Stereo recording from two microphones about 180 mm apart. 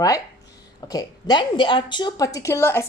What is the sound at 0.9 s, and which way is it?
A woman's voice, 20° left (ahead or behind).